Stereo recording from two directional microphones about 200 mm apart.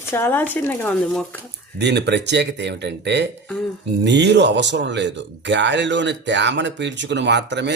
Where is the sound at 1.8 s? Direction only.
55° right (ahead or behind).